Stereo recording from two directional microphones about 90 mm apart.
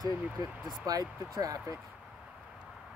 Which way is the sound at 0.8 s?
45° right (ahead or behind).